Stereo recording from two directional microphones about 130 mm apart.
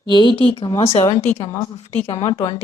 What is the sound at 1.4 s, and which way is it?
Speech, 35° left (ahead or behind).